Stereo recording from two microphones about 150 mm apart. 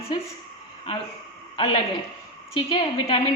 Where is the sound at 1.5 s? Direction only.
35° left (ahead or behind).